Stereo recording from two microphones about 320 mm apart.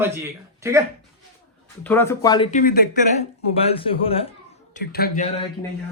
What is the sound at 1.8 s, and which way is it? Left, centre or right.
Speech, centre.